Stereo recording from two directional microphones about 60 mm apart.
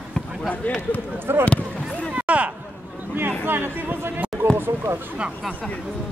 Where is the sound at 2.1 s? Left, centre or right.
Right.